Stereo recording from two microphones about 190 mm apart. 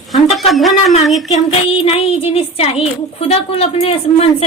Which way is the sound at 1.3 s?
30° left (ahead or behind).